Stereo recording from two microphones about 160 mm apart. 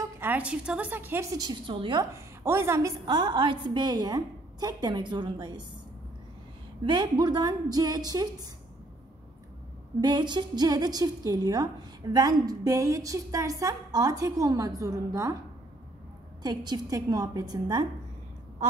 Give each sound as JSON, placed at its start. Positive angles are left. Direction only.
{"t": 0.0, "sound": "a woman's voice", "side_deg": -10}
{"t": 2.1, "sound": "a woman's voice", "side_deg": -15}
{"t": 6.8, "sound": "a woman's voice", "side_deg": -30}
{"t": 9.9, "sound": "a woman's voice", "side_deg": -25}
{"t": 16.4, "sound": "a woman's voice", "side_deg": -25}